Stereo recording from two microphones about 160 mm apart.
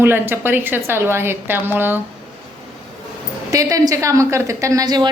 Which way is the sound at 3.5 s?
20° right (ahead or behind).